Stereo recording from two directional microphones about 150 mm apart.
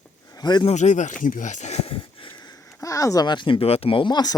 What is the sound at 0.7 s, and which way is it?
Speech, 50° left (ahead or behind).